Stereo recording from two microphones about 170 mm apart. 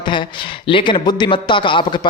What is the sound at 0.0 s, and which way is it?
Speech, 30° left (ahead or behind).